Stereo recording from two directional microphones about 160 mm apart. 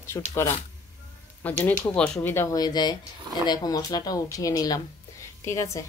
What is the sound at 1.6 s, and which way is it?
Speech, 10° left (ahead or behind).